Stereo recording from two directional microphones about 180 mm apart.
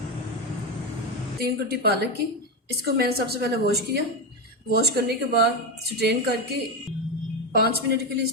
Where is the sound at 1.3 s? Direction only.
60° right (ahead or behind).